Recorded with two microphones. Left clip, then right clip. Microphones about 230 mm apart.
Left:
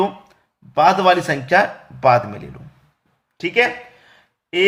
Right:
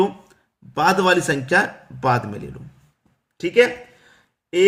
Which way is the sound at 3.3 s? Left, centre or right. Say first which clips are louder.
Right 1 dB; centre.